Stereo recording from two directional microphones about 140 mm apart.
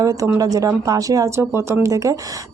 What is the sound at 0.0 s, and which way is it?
Speech, 25° right (ahead or behind).